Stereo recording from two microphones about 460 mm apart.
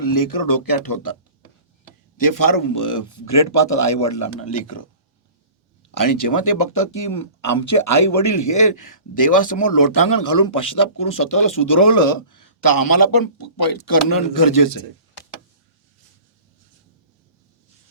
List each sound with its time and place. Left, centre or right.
0.0 s speech: left
2.1 s speech: left
5.9 s speech: left